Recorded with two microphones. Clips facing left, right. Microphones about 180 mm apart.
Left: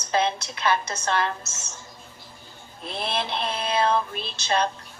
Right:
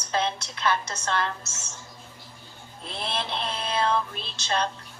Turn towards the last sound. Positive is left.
turn(degrees=10)  # may be behind; listen again after turning